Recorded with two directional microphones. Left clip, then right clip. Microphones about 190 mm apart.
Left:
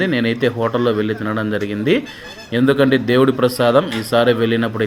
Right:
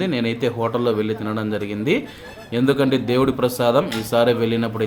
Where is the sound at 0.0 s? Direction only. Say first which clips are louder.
Left 4 dB; 10° left (ahead or behind).